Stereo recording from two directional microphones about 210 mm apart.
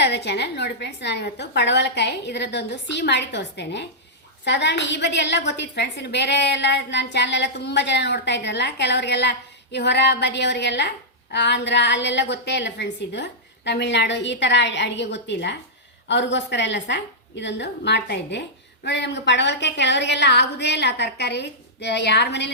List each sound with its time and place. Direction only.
0.0 s a woman's voice: 55° left (ahead or behind)